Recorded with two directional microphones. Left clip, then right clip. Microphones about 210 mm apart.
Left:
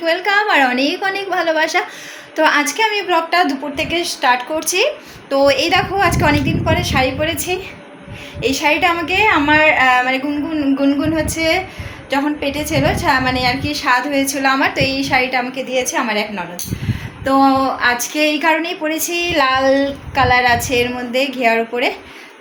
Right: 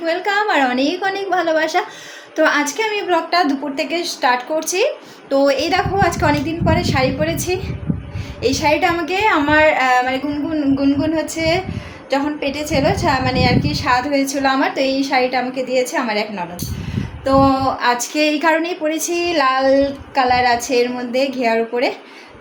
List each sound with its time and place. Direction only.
0.0 s a woman's voice: 5° right (ahead or behind)